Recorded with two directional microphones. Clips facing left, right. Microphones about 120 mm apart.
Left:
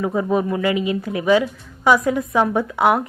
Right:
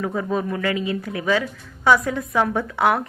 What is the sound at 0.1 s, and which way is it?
Speech, 15° left (ahead or behind).